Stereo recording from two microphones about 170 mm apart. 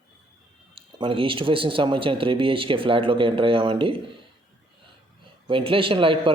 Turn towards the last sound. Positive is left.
turn(degrees=-30)  # may be behind; listen again after turning